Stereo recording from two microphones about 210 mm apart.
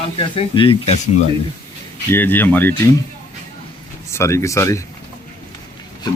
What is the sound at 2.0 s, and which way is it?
Speech, 10° left (ahead or behind).